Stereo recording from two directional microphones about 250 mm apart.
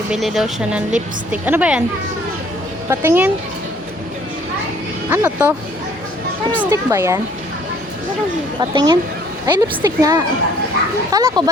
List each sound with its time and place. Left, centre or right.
0.1 s a woman's voice: centre
2.9 s a woman's voice: centre
5.0 s speech: centre
6.6 s a woman's voice: centre
8.7 s a woman's voice: centre